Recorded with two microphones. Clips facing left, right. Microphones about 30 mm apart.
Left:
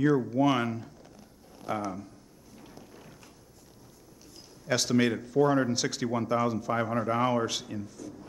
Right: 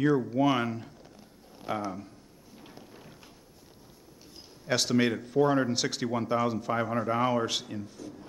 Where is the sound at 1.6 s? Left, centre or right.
Right.